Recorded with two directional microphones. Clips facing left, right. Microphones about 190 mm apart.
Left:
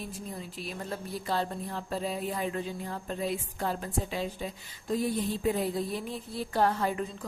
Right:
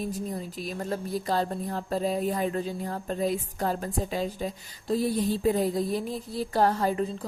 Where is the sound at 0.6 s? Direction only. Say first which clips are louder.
Right 5 dB; 40° right (ahead or behind).